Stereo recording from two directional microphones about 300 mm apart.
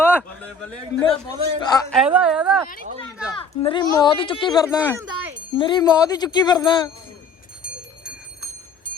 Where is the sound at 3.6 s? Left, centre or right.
Centre.